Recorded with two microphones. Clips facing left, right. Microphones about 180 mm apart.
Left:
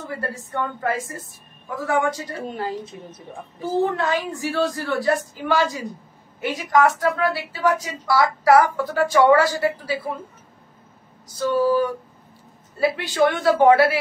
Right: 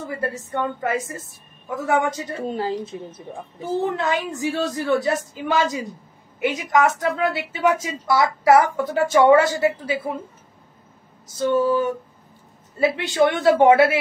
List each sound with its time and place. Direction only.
0.3 s a woman's voice: 20° right (ahead or behind)
3.9 s a woman's voice: 20° right (ahead or behind)
11.3 s a woman's voice: 20° right (ahead or behind)